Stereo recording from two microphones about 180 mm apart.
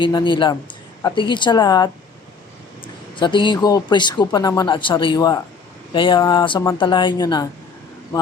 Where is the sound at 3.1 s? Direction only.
25° left (ahead or behind).